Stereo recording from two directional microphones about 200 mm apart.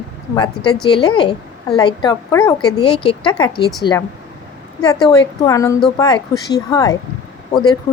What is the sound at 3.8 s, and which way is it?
Speech, 65° left (ahead or behind).